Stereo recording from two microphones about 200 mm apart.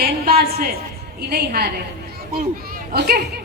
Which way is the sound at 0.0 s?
50° right (ahead or behind).